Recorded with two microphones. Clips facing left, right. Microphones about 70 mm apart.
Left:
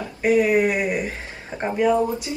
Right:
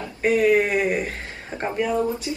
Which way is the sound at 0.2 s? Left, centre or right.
Centre.